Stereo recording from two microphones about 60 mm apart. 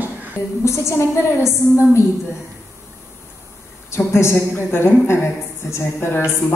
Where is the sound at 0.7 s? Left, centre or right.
Left.